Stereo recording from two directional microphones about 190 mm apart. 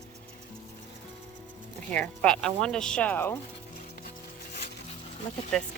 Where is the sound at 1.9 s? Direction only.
5° left (ahead or behind).